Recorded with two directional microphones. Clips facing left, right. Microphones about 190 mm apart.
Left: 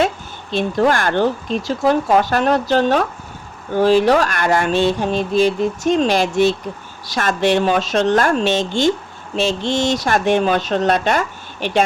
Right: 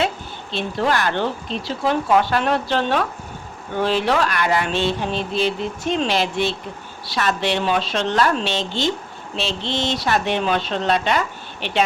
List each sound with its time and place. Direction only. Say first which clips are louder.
0.5 s speech: left 5 dB; 45° left (ahead or behind)